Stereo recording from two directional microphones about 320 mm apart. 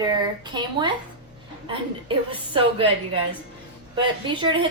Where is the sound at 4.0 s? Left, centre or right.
Centre.